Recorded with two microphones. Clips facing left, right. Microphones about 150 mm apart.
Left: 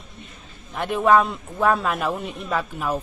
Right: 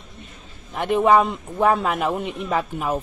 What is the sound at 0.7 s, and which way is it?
Speech, 15° right (ahead or behind).